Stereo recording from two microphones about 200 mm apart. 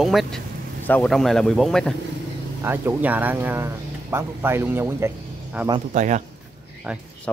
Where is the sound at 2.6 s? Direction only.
10° right (ahead or behind).